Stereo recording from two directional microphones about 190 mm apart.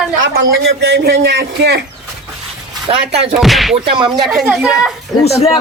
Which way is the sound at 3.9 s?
25° right (ahead or behind).